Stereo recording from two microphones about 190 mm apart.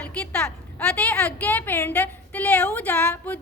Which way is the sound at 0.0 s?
5° left (ahead or behind).